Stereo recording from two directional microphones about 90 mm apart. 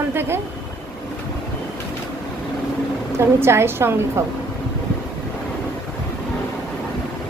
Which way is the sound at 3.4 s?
30° right (ahead or behind).